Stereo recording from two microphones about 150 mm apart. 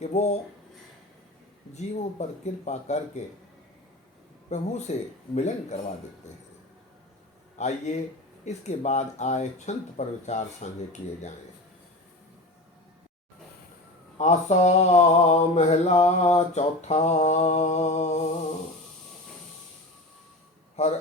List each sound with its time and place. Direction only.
0.0 s mantra: 50° left (ahead or behind)
1.7 s mantra: 50° left (ahead or behind)
4.4 s mantra: 50° left (ahead or behind)
7.6 s mantra: 50° left (ahead or behind)
14.2 s mantra: 50° left (ahead or behind)